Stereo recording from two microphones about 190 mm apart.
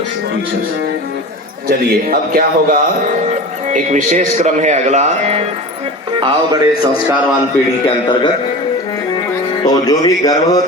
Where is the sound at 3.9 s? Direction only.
40° right (ahead or behind).